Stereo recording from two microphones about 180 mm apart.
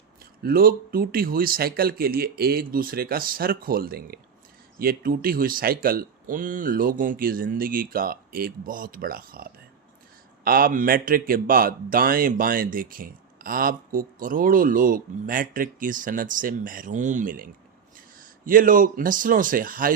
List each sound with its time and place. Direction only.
0.4 s speech: 55° right (ahead or behind)